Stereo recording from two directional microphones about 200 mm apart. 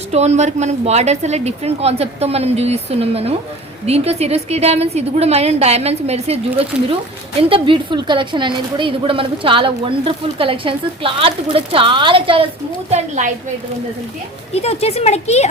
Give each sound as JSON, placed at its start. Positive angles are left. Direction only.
{"t": 0.1, "sound": "a woman's voice", "side_deg": -35}
{"t": 12.9, "sound": "speech", "side_deg": -35}
{"t": 14.5, "sound": "speech", "side_deg": 30}